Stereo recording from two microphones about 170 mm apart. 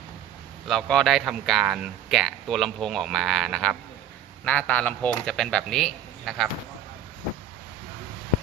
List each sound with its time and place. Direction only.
0.7 s speech: 5° left (ahead or behind)